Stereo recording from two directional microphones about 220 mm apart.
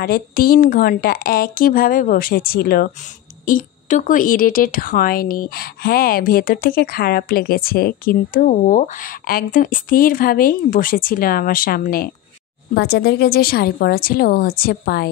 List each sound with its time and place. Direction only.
0.0 s a woman's voice: 40° left (ahead or behind)